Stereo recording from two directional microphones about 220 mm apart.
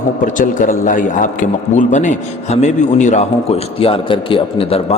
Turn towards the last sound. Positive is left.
turn(degrees=25)  # may be behind; listen again after turning